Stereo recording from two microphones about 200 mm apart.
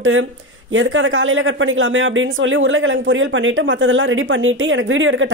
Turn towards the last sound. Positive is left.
turn(degrees=-75)  # may be behind; listen again after turning